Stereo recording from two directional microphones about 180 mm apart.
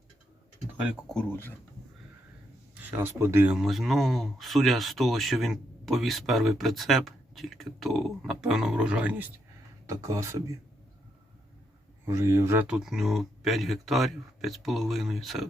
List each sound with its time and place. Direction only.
1.0 s speech: 5° left (ahead or behind)
2.9 s speech: 15° right (ahead or behind)
12.0 s speech: 15° right (ahead or behind); by 15.4 s centre (ahead or behind)